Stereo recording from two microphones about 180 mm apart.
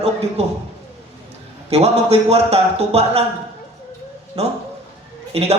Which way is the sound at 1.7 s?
35° right (ahead or behind).